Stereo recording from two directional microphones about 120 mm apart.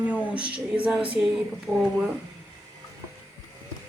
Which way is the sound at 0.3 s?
10° right (ahead or behind).